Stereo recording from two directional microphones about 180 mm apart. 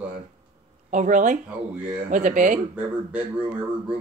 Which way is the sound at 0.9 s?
45° right (ahead or behind).